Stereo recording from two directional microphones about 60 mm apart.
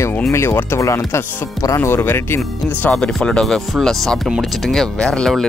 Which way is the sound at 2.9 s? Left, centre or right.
Centre.